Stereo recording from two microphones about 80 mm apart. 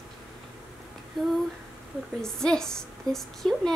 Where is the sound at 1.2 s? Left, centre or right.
Centre.